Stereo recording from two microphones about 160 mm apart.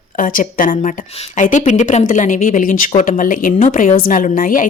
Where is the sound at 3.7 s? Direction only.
45° left (ahead or behind).